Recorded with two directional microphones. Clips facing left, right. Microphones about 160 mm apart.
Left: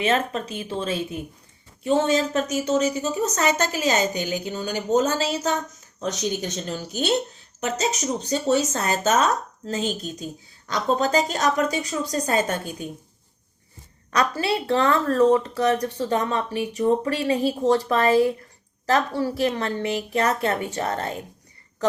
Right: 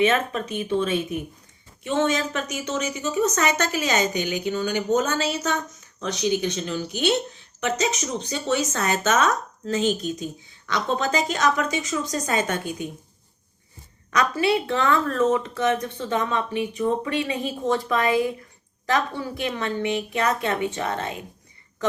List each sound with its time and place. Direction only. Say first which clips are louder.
0.0 s speech: right 2 dB; 30° left (ahead or behind)
14.1 s speech: right 1 dB; 30° left (ahead or behind)